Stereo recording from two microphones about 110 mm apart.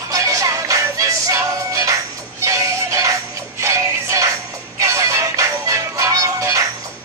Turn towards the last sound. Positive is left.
turn(degrees=-30)  # may be behind; listen again after turning